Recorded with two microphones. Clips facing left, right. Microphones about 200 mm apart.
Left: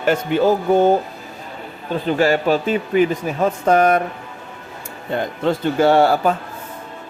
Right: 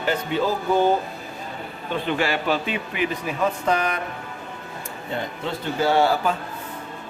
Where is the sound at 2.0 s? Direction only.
40° left (ahead or behind).